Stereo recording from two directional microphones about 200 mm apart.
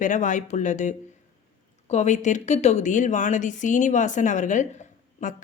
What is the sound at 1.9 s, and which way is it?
Speech, 35° left (ahead or behind).